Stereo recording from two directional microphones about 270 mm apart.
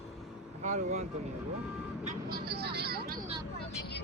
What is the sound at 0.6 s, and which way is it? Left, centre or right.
Speech, right.